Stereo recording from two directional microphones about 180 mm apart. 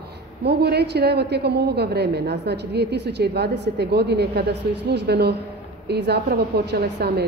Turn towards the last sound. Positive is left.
turn(degrees=-65)  # may be behind; listen again after turning